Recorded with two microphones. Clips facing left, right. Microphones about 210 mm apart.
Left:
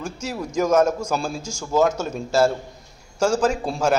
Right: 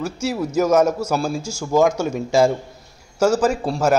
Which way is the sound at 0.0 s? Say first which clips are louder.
Right 6 dB; 10° right (ahead or behind).